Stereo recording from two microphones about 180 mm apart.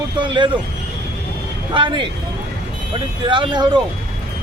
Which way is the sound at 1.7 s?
25° right (ahead or behind).